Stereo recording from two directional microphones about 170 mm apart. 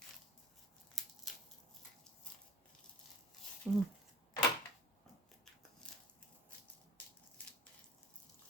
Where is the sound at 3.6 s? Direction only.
Centre (ahead or behind).